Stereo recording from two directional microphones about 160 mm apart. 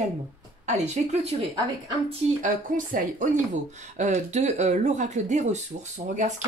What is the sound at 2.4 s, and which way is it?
Speech, 55° right (ahead or behind).